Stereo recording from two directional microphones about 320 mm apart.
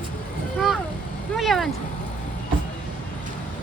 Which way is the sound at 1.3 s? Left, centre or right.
Centre.